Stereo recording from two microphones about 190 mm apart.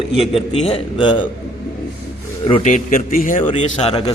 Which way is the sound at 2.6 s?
40° left (ahead or behind).